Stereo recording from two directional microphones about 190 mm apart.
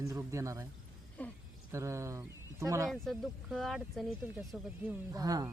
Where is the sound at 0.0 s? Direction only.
15° right (ahead or behind).